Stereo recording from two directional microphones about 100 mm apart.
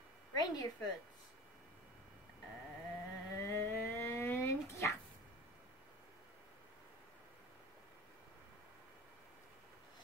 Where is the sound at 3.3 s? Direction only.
25° left (ahead or behind).